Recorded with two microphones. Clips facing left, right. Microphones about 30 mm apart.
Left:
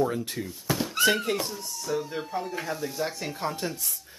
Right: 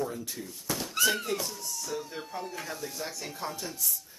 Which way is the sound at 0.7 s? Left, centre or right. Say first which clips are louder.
Left 5 dB; left.